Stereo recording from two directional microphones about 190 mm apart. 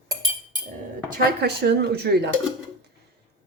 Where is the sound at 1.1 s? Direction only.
60° right (ahead or behind).